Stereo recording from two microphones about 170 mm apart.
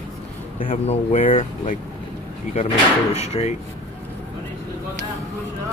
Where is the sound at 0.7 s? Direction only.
40° left (ahead or behind).